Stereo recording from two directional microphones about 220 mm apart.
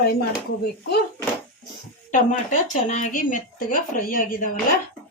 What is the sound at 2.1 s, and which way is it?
Speech, 35° left (ahead or behind).